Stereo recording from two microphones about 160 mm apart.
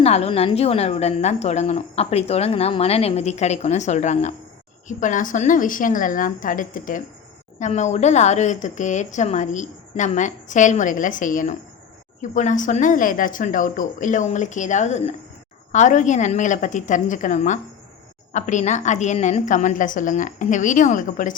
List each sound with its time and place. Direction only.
0.0 s a woman's voice: 40° left (ahead or behind)